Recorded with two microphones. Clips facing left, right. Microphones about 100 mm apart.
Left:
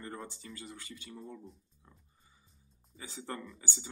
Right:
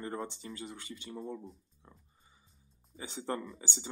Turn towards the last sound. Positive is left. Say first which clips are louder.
# right 4 dB
turn(degrees=-25)  # may be behind; listen again after turning